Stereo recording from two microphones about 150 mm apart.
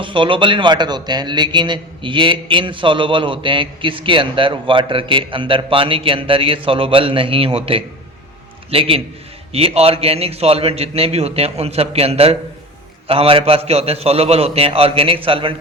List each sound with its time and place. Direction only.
0.0 s a man's voice: 35° right (ahead or behind)